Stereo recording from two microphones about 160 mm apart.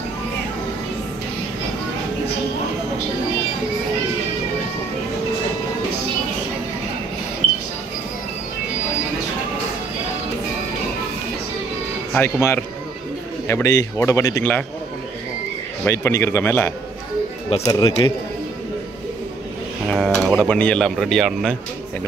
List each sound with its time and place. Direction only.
12.1 s speech: 15° left (ahead or behind)
15.8 s speech: 15° left (ahead or behind)
19.9 s speech: centre (ahead or behind)